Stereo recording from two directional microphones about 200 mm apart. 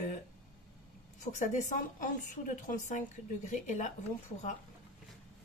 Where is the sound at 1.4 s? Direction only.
40° left (ahead or behind).